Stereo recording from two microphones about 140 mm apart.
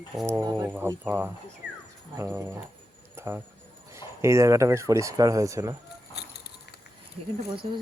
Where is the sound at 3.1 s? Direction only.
15° right (ahead or behind).